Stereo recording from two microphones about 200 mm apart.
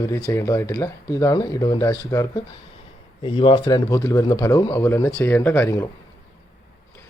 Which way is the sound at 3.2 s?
25° left (ahead or behind).